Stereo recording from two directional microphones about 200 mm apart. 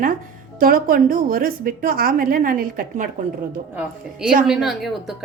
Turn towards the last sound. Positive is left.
turn(degrees=0)  # may be behind; listen again after turning